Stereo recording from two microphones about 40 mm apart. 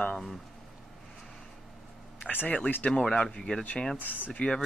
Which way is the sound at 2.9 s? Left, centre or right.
Centre.